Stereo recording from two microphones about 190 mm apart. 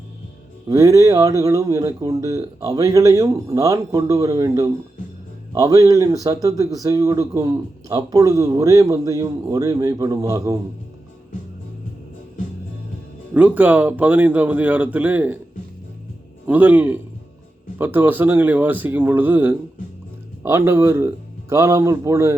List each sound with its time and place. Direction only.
0.7 s speech: 15° right (ahead or behind)
13.3 s speech: 5° right (ahead or behind)
16.5 s speech: 10° right (ahead or behind)